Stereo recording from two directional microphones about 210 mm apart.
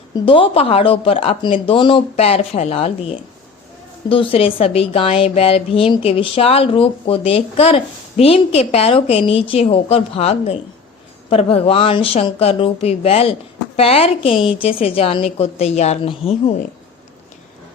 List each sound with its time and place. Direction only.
0.3 s a woman's voice: 25° left (ahead or behind)